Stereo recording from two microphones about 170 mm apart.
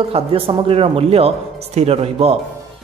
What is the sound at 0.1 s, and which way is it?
Speech, 35° right (ahead or behind).